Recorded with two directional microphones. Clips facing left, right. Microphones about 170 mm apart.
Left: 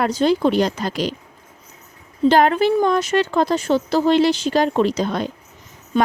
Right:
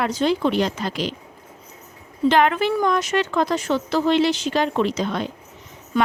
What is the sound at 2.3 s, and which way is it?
Speech, 35° left (ahead or behind).